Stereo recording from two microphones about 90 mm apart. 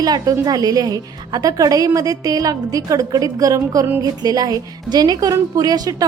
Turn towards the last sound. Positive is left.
turn(degrees=-45)  # may be behind; listen again after turning